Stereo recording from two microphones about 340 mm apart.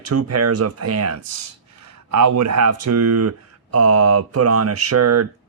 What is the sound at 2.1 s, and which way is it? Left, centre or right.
Speech, right.